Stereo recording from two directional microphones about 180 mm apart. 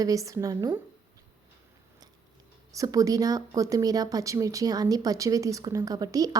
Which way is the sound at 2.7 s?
20° right (ahead or behind).